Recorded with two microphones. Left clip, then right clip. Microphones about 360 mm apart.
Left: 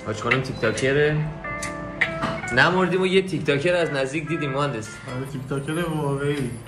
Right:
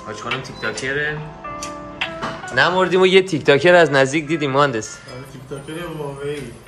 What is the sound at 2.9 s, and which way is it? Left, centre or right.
Speech, centre.